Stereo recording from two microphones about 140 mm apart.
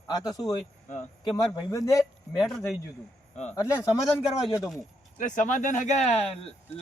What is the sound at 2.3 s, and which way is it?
Speech, centre (ahead or behind).